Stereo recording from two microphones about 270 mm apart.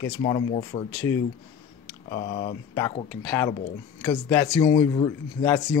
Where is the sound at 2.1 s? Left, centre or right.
Left.